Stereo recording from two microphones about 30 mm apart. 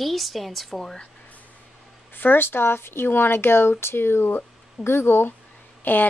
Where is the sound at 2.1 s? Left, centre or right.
Left.